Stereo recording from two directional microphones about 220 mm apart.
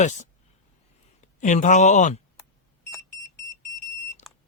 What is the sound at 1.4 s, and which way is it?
Speech, 35° left (ahead or behind).